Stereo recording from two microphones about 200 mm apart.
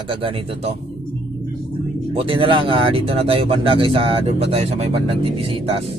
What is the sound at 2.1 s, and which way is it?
Speech, 25° right (ahead or behind).